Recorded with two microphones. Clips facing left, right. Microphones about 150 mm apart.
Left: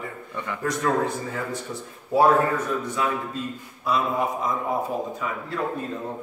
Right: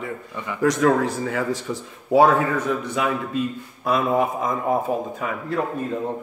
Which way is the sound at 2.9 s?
75° right (ahead or behind).